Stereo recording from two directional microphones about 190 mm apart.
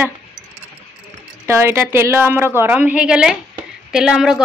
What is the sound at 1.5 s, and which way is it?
A woman's voice, 10° right (ahead or behind).